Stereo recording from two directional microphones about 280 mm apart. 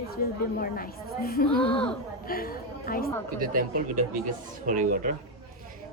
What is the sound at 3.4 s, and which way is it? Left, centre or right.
Speech, right.